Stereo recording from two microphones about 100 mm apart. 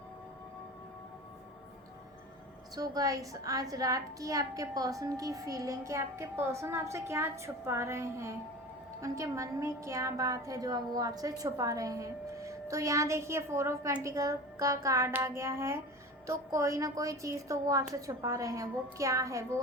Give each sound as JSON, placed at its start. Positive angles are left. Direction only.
{"t": 2.7, "sound": "a woman's voice", "side_deg": -40}